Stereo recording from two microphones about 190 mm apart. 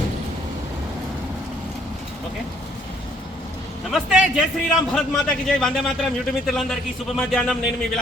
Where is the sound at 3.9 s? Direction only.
5° right (ahead or behind).